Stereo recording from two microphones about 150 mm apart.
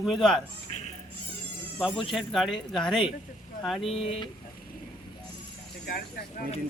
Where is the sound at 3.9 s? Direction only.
40° left (ahead or behind).